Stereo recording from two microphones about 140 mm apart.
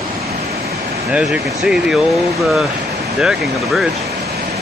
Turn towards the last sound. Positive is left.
turn(degrees=-5)  # may be behind; listen again after turning